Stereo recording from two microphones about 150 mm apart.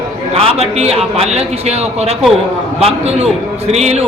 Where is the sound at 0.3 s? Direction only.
45° right (ahead or behind).